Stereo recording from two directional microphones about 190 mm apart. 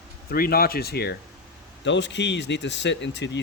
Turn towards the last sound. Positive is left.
turn(degrees=65)  # may be behind; listen again after turning